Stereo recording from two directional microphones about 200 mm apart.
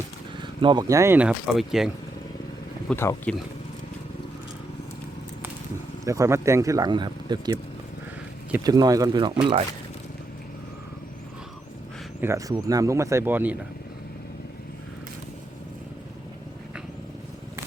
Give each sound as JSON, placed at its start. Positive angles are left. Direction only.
{"t": 0.3, "sound": "speech", "side_deg": -25}
{"t": 2.9, "sound": "speech", "side_deg": 10}
{"t": 6.1, "sound": "speech", "side_deg": -15}
{"t": 8.6, "sound": "speech", "side_deg": -20}
{"t": 12.2, "sound": "speech", "side_deg": -15}